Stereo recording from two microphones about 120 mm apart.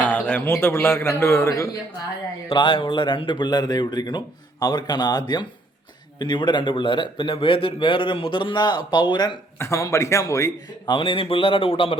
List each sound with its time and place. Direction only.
0.0 s a man's voice: 15° left (ahead or behind)
2.5 s a man's voice: 45° left (ahead or behind)
9.6 s a man's voice: 25° left (ahead or behind)
10.8 s a man's voice: 45° left (ahead or behind)